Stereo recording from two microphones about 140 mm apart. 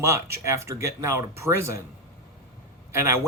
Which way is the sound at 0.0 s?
20° right (ahead or behind).